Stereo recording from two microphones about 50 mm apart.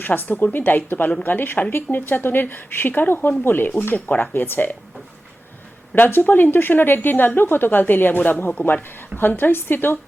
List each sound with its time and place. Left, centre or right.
0.0 s a woman's voice: left
5.9 s a woman's voice: left